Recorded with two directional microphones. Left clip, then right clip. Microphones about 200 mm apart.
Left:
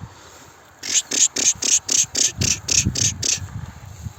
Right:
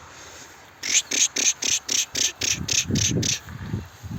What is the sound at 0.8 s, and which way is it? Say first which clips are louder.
Cricket: left 2 dB; 25° left (ahead or behind).